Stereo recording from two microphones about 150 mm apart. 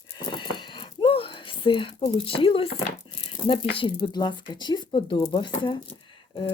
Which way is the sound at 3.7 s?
30° left (ahead or behind).